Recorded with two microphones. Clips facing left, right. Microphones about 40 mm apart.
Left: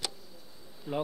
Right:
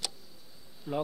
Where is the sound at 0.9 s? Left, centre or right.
Centre.